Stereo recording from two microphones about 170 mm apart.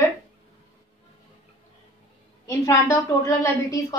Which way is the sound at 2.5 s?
20° left (ahead or behind).